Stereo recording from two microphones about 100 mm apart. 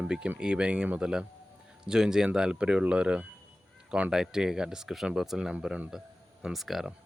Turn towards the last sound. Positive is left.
turn(degrees=0)  # may be behind; listen again after turning